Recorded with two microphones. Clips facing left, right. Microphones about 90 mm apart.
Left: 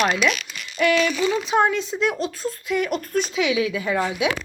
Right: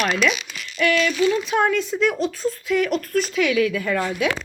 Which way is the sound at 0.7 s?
25° left (ahead or behind).